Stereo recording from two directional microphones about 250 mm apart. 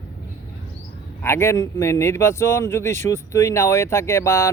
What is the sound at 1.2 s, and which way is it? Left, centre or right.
Speech, centre.